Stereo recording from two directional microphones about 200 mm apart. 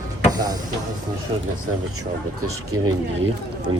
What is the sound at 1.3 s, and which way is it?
Speech, 30° right (ahead or behind).